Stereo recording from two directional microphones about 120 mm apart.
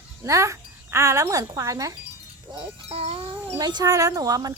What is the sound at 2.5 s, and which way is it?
Speech, 50° right (ahead or behind).